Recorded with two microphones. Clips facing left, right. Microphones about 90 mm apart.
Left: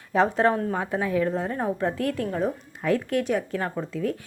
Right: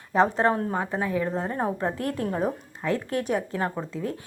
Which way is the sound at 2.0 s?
40° right (ahead or behind).